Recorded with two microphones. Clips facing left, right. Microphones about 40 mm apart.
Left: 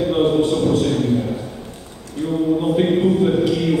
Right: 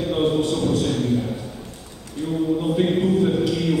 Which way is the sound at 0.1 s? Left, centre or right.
Centre.